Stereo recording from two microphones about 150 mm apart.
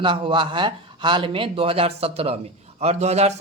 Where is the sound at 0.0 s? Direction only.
35° right (ahead or behind).